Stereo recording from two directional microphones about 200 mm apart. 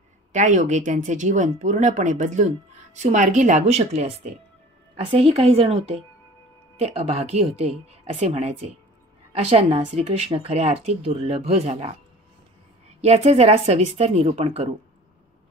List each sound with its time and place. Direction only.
0.3 s a woman's voice: 40° right (ahead or behind)
13.0 s speech: 30° right (ahead or behind)